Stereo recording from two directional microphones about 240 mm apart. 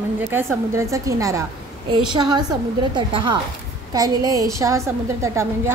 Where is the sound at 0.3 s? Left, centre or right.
Centre.